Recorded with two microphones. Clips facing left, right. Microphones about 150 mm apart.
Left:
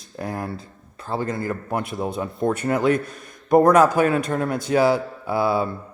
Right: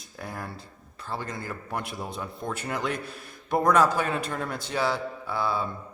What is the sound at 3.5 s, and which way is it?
Speech, 55° left (ahead or behind).